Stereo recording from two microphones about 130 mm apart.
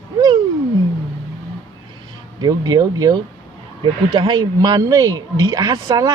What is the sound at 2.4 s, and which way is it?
Speech, 30° right (ahead or behind).